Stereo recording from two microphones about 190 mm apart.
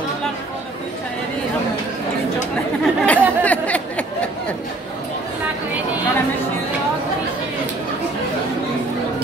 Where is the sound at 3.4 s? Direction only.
5° left (ahead or behind).